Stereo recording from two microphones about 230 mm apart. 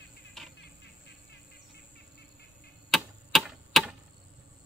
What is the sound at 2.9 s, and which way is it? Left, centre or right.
Clock, centre.